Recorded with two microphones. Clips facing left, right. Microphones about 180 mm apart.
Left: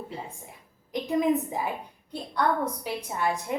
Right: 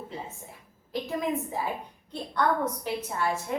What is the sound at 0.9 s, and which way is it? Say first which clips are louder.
Speech: left 5 dB; 15° left (ahead or behind).